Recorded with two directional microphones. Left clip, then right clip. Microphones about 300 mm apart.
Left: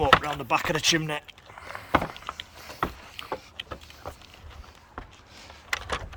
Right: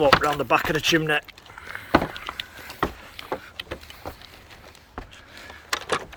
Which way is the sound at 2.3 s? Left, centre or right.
Right.